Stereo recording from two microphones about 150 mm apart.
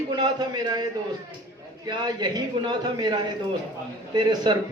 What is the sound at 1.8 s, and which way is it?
A man's voice, 30° right (ahead or behind).